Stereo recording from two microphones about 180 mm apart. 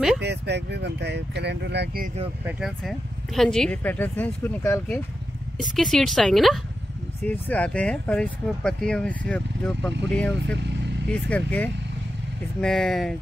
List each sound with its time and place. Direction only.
0.2 s speech: 70° right (ahead or behind)
2.8 s a woman's voice: 5° left (ahead or behind)
10.4 s speech: 75° right (ahead or behind)
11.1 s a woman's voice: 5° left (ahead or behind)